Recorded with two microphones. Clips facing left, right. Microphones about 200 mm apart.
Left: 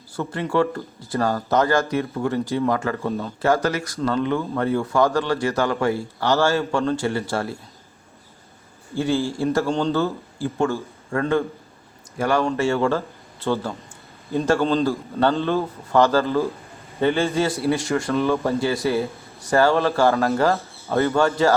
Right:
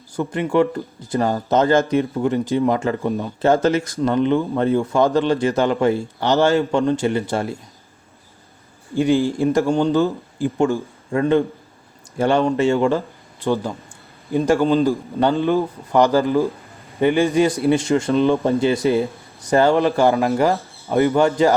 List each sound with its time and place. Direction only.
0.2 s a man's voice: 15° right (ahead or behind)
9.0 s a man's voice: 15° right (ahead or behind)